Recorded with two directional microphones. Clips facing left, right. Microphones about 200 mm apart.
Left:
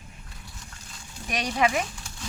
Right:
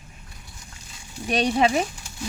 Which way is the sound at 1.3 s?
30° right (ahead or behind).